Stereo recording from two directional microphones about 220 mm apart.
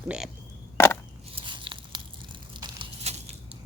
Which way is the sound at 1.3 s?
20° right (ahead or behind).